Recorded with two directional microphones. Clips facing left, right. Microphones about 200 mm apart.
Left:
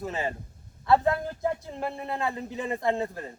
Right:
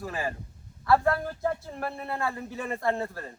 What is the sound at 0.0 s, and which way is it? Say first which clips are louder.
A man's voice: left 1 dB; 25° left (ahead or behind).